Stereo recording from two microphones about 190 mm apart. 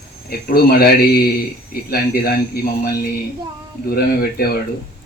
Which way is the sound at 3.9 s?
55° left (ahead or behind).